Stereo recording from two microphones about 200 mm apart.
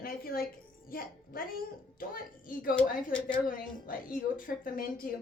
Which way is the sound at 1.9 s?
45° left (ahead or behind).